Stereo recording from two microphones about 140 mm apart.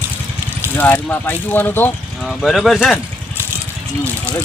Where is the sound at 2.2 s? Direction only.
Centre (ahead or behind).